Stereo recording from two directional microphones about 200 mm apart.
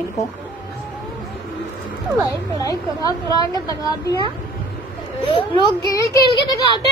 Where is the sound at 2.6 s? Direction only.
20° left (ahead or behind).